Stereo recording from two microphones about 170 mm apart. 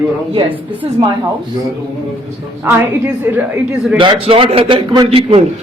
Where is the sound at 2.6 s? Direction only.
10° right (ahead or behind).